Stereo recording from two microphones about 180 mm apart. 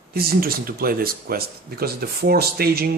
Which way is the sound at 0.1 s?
60° right (ahead or behind).